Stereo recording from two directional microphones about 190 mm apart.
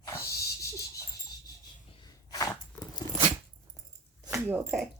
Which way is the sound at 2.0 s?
20° left (ahead or behind).